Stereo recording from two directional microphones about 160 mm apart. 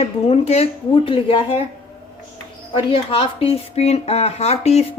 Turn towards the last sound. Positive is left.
turn(degrees=40)  # may be behind; listen again after turning